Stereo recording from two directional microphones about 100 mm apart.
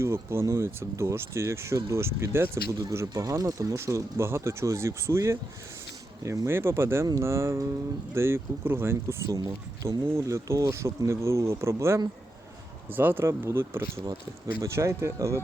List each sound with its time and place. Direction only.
0.0 s speech: 25° right (ahead or behind)
10.1 s speech: 30° right (ahead or behind)